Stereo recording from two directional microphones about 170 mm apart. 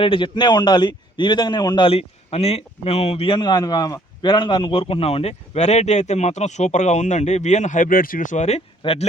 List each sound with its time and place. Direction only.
0.0 s a man's voice: 30° left (ahead or behind)